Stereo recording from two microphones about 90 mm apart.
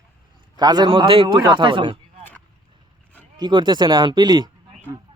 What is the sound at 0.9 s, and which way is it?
Speech, 85° right.